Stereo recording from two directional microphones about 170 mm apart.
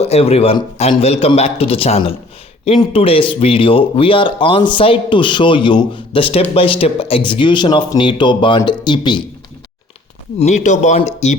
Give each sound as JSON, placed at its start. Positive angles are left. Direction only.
{"t": 0.0, "sound": "speech", "side_deg": 35}
{"t": 10.3, "sound": "speech", "side_deg": 45}